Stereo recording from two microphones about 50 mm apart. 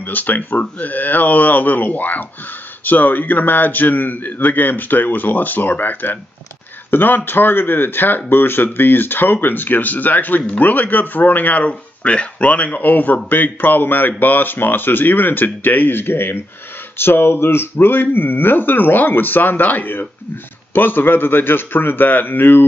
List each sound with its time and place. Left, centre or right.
0.0 s speech: left